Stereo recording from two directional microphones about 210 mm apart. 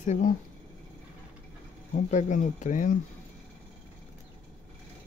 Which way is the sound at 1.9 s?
35° left (ahead or behind).